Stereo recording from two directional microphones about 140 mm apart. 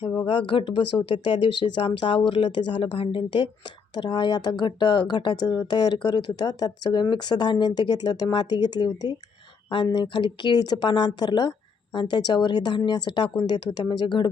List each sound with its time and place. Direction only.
0.3 s speech: 35° left (ahead or behind)